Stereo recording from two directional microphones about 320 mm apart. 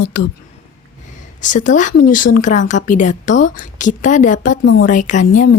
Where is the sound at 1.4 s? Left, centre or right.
Left.